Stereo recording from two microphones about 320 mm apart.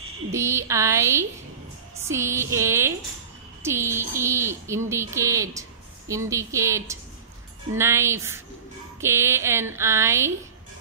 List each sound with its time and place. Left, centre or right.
0.3 s speech: centre